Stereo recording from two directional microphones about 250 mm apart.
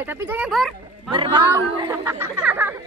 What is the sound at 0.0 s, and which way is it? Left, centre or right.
Speech, centre.